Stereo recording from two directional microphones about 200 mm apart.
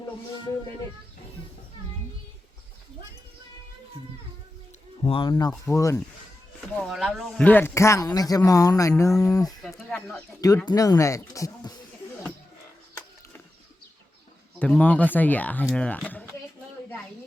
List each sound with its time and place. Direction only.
5.0 s speech: 25° left (ahead or behind)
5.3 s speech: 15° left (ahead or behind)
6.7 s speech: centre (ahead or behind); by 9.6 s 20° left (ahead or behind)
9.6 s speech: centre (ahead or behind)
10.7 s speech: 20° left (ahead or behind)
14.6 s speech: 5° left (ahead or behind)